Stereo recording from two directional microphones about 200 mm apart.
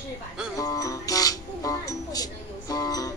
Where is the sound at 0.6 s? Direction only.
15° left (ahead or behind).